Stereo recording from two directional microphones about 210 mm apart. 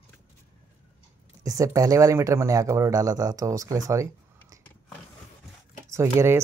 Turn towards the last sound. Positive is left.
turn(degrees=-10)  # may be behind; listen again after turning